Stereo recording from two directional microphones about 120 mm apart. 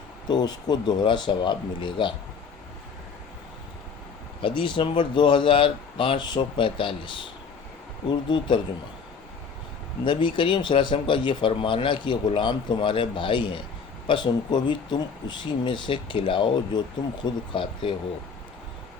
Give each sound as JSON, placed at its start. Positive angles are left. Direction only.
{"t": 0.3, "sound": "speech", "side_deg": 35}
{"t": 4.4, "sound": "speech", "side_deg": 40}
{"t": 10.0, "sound": "speech", "side_deg": 40}